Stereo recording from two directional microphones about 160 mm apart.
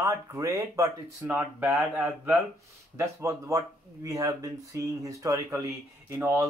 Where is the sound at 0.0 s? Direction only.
20° right (ahead or behind).